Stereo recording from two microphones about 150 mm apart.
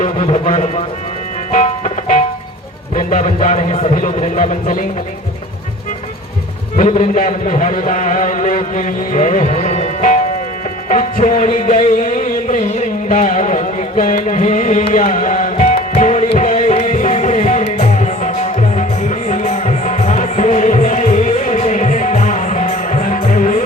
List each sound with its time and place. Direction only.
0.0 s speech: 55° left (ahead or behind)
1.5 s music: 60° left (ahead or behind)
2.9 s a man's voice: 60° left (ahead or behind)
6.7 s a man's voice: 60° left (ahead or behind)
10.8 s music: 60° left (ahead or behind)